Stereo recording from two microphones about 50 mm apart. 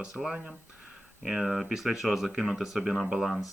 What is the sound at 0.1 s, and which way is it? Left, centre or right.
Speech, centre.